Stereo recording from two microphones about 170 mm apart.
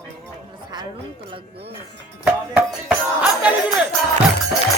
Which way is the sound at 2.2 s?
10° right (ahead or behind).